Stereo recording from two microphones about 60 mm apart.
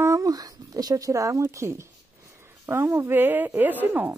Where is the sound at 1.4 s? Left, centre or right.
Right.